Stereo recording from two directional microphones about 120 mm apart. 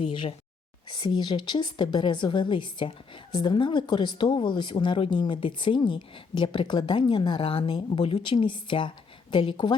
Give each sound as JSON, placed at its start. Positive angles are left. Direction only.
{"t": 0.0, "sound": "speech", "side_deg": 45}